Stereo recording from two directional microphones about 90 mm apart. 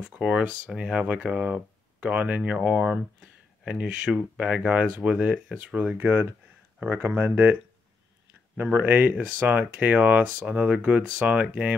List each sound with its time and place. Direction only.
0.0 s speech: 10° right (ahead or behind)
8.7 s speech: 20° right (ahead or behind)